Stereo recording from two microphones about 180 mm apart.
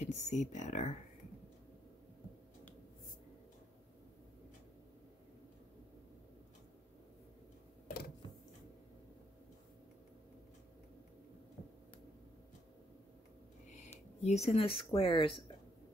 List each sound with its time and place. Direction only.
0.0 s speech: 40° left (ahead or behind)
13.7 s speech: 40° left (ahead or behind)